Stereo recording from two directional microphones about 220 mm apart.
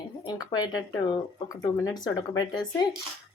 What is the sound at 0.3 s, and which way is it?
Speech, 20° left (ahead or behind).